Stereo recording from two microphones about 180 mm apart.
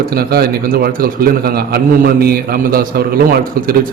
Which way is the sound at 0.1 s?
55° right (ahead or behind).